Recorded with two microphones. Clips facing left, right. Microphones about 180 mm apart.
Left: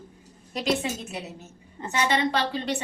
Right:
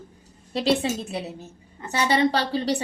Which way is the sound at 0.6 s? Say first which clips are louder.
Right 4 dB; 30° right (ahead or behind).